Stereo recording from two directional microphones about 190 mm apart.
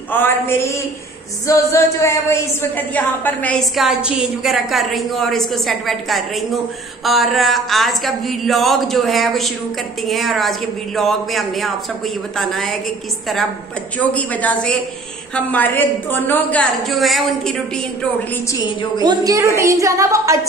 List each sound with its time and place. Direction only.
0.1 s a woman's voice: 10° left (ahead or behind)
13.9 s a woman's voice: 10° left (ahead or behind)
18.5 s a woman's voice: 25° left (ahead or behind)
19.0 s a woman's voice: 15° right (ahead or behind)